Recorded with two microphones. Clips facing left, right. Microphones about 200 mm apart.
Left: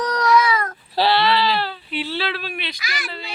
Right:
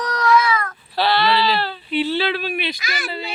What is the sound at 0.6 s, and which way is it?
Child singing, 30° left (ahead or behind).